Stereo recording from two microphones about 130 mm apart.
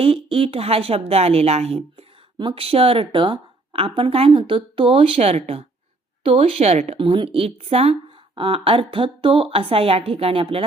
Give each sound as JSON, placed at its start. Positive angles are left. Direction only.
{"t": 0.0, "sound": "a woman's voice", "side_deg": -45}